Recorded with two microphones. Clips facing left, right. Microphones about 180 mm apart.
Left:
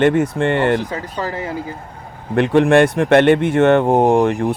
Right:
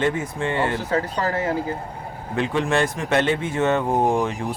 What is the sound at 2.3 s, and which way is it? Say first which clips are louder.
Speech: left 10 dB; 65° left (ahead or behind).